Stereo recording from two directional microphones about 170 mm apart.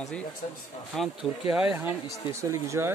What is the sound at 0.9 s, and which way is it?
Speech, centre (ahead or behind).